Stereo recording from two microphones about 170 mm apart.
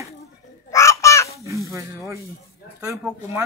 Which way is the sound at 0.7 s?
15° left (ahead or behind).